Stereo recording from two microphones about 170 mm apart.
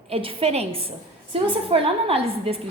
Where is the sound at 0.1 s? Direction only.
35° right (ahead or behind).